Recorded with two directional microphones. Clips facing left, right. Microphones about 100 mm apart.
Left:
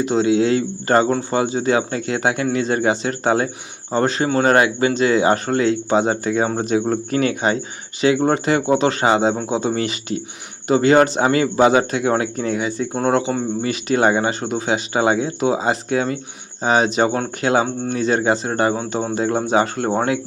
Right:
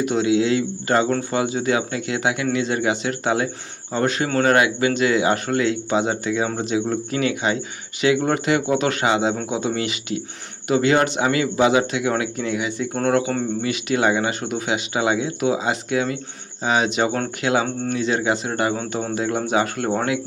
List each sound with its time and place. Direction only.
0.0 s speech: 30° left (ahead or behind)
12.9 s speech: 20° left (ahead or behind)
13.6 s speech: 35° left (ahead or behind)